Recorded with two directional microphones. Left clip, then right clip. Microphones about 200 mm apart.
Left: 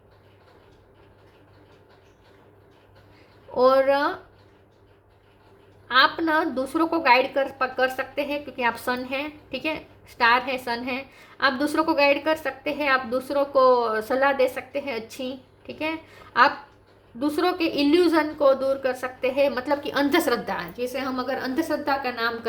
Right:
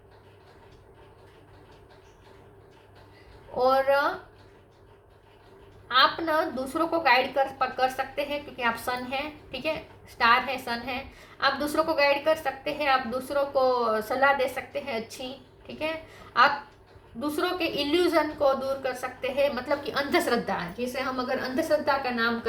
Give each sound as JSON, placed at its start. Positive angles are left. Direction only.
{"t": 3.5, "sound": "a woman's voice", "side_deg": 45}
{"t": 5.9, "sound": "a woman's voice", "side_deg": 45}